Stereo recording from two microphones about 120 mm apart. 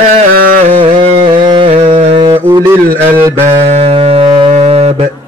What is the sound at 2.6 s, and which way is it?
Speech, 20° right (ahead or behind).